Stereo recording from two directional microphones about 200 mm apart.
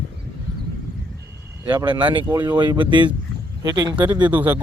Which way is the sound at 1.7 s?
25° right (ahead or behind).